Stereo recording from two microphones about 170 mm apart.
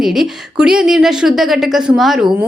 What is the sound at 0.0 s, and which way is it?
Speech, centre (ahead or behind).